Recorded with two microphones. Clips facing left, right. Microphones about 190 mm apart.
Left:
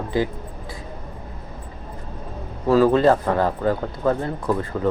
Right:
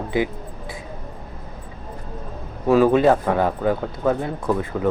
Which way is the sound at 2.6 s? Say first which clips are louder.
Right 1 dB; 15° right (ahead or behind).